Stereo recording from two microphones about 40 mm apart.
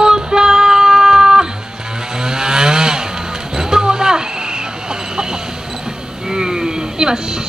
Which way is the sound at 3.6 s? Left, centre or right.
Centre.